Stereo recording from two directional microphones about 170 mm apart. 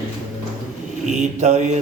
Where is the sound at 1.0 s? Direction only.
45° right (ahead or behind).